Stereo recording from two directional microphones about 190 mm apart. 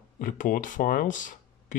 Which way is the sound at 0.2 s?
45° left (ahead or behind).